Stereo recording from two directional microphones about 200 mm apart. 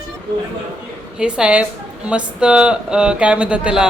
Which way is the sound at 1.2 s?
5° right (ahead or behind).